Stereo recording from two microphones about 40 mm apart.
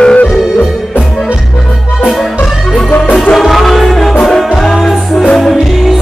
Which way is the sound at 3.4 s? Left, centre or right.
Centre.